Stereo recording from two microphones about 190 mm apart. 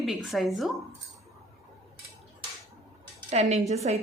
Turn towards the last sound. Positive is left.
turn(degrees=-35)  # may be behind; listen again after turning